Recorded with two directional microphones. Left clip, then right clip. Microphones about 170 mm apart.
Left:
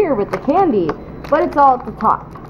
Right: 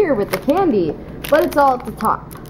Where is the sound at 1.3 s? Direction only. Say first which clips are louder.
Right 1 dB; 25° right (ahead or behind).